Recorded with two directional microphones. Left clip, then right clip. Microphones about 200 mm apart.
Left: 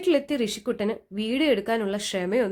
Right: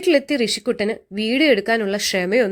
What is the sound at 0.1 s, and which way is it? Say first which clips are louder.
Speech: right 6 dB; 20° right (ahead or behind).